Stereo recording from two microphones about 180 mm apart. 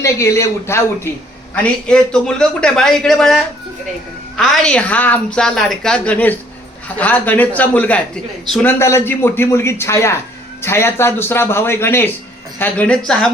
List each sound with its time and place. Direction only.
0.0 s a woman's voice: 15° left (ahead or behind)